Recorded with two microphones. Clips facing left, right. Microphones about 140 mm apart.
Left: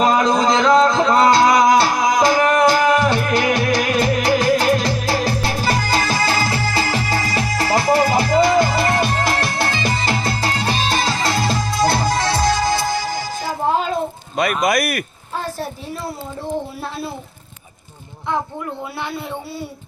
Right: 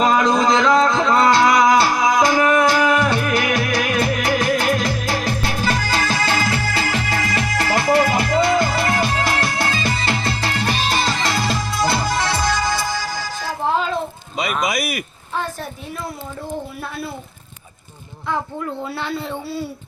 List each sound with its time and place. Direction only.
0.0 s music: 35° left (ahead or behind)
9.9 s music: 40° left (ahead or behind)
10.5 s music: 25° left (ahead or behind)
11.7 s music: 45° left (ahead or behind)
13.7 s a sound: 45° left (ahead or behind)
18.9 s a sound: 15° left (ahead or behind)